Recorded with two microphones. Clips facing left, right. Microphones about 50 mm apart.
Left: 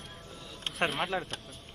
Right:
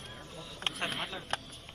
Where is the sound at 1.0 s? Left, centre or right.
Left.